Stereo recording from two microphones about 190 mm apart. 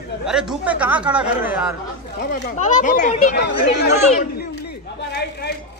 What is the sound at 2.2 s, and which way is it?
Speech, 55° left (ahead or behind).